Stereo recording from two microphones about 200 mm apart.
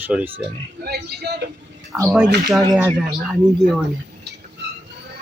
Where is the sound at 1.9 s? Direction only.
5° right (ahead or behind).